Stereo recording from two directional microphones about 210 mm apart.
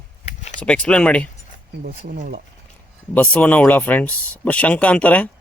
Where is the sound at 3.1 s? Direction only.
5° left (ahead or behind).